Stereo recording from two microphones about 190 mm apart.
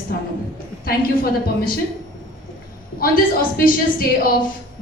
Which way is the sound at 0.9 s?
50° left (ahead or behind).